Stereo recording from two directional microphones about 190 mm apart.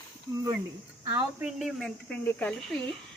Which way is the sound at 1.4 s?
Centre (ahead or behind).